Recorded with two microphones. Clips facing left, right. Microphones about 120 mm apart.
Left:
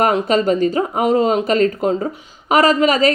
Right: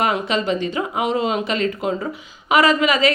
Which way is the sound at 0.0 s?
45° left (ahead or behind).